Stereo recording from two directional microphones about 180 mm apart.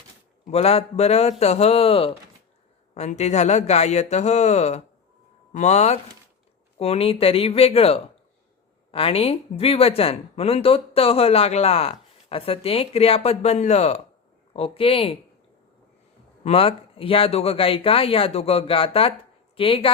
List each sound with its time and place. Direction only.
0.5 s speech: 35° left (ahead or behind)
16.4 s speech: 30° left (ahead or behind)